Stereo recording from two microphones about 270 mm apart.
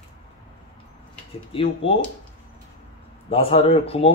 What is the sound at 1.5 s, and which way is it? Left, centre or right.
Speech, left.